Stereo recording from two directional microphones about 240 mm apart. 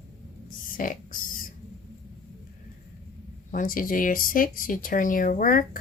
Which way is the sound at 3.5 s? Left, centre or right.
Left.